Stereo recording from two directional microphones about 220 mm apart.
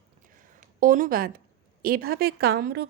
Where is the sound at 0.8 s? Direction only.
40° right (ahead or behind).